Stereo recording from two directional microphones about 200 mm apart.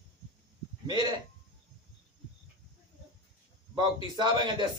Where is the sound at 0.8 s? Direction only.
20° right (ahead or behind).